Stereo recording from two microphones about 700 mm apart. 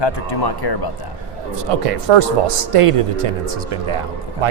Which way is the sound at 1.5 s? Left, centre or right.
Right.